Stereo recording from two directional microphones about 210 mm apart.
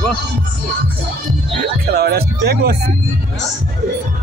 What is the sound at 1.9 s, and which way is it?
Speech, 50° right (ahead or behind).